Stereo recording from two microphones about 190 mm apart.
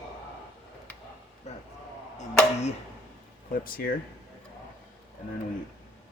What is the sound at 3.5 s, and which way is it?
Speech, 50° left (ahead or behind).